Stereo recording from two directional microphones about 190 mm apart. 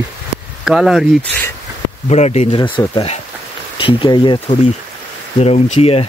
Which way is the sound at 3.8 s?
25° left (ahead or behind).